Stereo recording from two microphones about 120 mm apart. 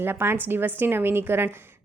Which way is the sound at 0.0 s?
20° right (ahead or behind).